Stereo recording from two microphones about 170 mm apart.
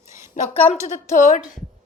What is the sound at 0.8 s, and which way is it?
Speech, 45° left (ahead or behind).